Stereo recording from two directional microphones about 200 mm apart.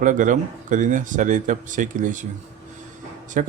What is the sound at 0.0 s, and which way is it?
Speech, 40° right (ahead or behind).